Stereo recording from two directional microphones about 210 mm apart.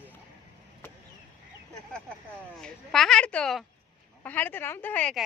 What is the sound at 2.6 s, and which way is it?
A woman's voice, centre (ahead or behind).